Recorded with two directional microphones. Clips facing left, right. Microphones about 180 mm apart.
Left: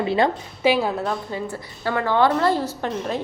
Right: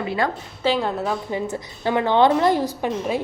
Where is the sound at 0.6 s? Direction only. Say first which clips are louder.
Left 2 dB; 10° left (ahead or behind).